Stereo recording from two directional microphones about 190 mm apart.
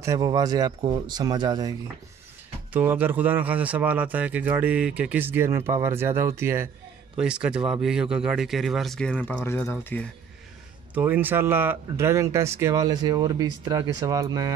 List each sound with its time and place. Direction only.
0.0 s speech: 20° right (ahead or behind)
2.7 s speech: 10° right (ahead or behind); by 10.0 s 10° left (ahead or behind)
11.0 s speech: 10° right (ahead or behind)